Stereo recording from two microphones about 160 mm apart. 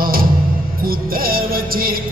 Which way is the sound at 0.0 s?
65° right (ahead or behind).